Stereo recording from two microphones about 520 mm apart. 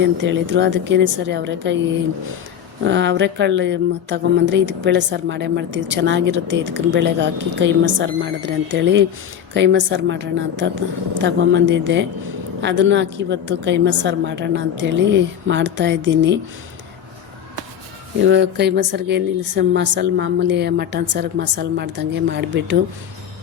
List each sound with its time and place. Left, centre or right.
0.2 s speech: right
2.8 s speech: centre
18.3 s speech: centre